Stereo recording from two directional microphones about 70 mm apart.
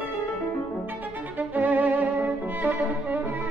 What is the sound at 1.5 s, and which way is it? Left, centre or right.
Violin, right.